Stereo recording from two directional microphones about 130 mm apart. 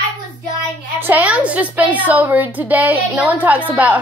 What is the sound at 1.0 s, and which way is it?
A woman's voice, 10° right (ahead or behind).